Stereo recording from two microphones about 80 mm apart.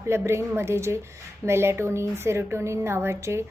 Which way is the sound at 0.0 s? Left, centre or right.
Right.